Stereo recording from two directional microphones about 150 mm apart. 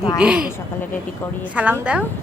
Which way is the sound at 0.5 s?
10° left (ahead or behind).